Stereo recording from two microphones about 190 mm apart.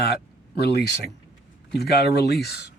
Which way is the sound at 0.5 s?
60° left (ahead or behind).